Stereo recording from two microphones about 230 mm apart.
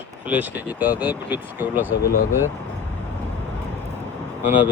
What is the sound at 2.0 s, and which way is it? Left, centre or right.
Speech, left.